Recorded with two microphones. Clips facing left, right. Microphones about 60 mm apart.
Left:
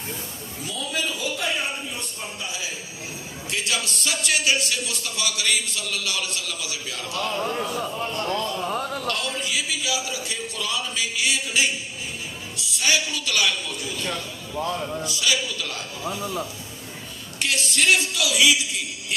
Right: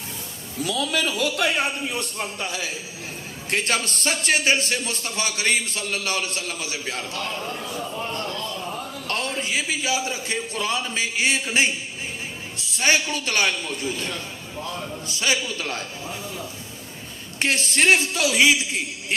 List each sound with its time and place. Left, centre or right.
0.6 s a man's voice: right
3.5 s a man's voice: right
7.3 s a man's voice: left
8.7 s a sound: left
9.0 s a man's voice: right
14.1 s a man's voice: left
15.0 s a man's voice: right
17.4 s a man's voice: right